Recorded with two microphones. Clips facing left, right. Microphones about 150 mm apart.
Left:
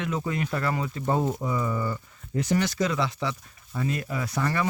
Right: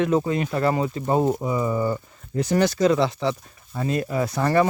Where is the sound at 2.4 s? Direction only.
35° right (ahead or behind).